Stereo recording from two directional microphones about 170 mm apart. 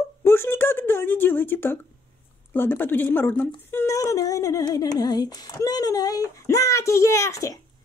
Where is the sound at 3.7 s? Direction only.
15° left (ahead or behind).